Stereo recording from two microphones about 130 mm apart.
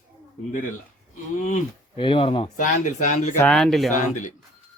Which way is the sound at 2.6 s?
75° left (ahead or behind).